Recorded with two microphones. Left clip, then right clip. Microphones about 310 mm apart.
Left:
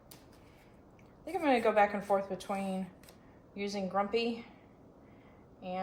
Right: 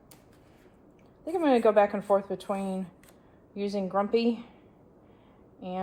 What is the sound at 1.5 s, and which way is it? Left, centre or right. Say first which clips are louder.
A woman's voice: right 5 dB; centre.